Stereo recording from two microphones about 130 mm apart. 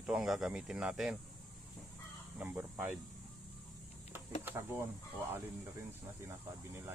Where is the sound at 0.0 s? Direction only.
5° right (ahead or behind).